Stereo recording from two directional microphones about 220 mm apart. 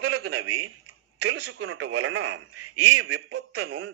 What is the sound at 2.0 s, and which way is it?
Speech, 55° right (ahead or behind).